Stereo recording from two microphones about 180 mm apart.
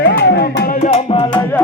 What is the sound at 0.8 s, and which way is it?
Music, 35° left (ahead or behind).